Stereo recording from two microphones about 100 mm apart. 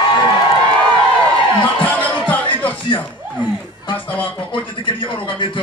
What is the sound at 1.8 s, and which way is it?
Music, 15° left (ahead or behind).